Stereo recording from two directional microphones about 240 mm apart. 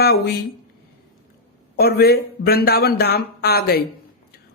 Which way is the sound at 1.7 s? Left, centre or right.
Left.